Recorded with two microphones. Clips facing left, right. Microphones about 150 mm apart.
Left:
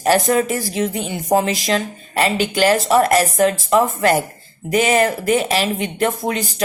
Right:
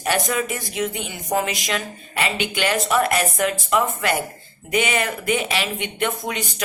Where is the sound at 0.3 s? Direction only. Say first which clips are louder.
Left 7 dB; 35° left (ahead or behind).